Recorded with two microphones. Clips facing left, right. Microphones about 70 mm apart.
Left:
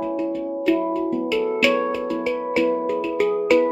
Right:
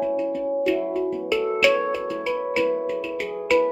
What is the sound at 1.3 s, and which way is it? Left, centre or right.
Music, centre.